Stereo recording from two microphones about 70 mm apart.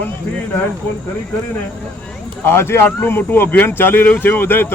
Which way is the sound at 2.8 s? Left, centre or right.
Left.